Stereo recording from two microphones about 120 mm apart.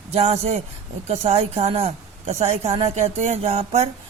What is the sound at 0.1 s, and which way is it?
A woman's voice, 60° right (ahead or behind).